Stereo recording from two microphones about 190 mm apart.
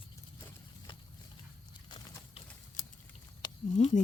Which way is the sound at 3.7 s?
40° left (ahead or behind).